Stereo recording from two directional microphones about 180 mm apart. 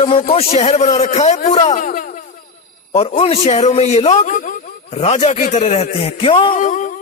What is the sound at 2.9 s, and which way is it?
A man's voice, 35° left (ahead or behind).